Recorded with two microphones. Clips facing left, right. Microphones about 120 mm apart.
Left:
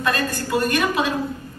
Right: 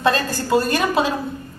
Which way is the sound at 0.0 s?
30° right (ahead or behind).